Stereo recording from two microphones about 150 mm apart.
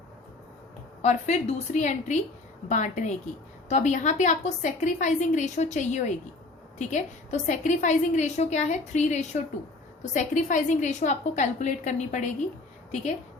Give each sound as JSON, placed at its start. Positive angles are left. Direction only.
{"t": 1.0, "sound": "a woman's voice", "side_deg": 50}